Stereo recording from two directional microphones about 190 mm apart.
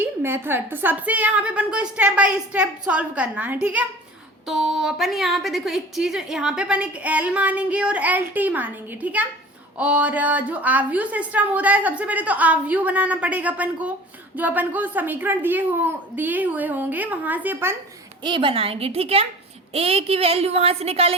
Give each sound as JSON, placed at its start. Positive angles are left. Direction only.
{"t": 0.0, "sound": "a woman's voice", "side_deg": -10}
{"t": 18.2, "sound": "a woman's voice", "side_deg": -25}